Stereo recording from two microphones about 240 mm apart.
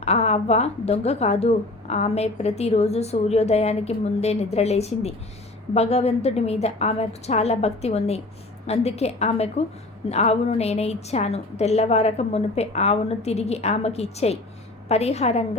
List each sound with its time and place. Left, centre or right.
0.0 s speech: left